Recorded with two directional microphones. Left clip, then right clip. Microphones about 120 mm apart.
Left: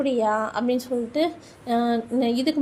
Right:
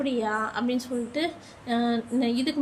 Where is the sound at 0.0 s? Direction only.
25° left (ahead or behind).